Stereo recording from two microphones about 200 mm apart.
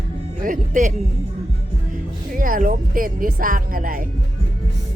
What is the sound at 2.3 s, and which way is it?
Speech, 40° right (ahead or behind).